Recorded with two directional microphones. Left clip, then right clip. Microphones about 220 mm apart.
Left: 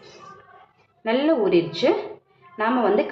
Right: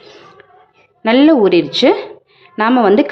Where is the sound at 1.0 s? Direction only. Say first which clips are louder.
Right 10 dB; 50° right (ahead or behind).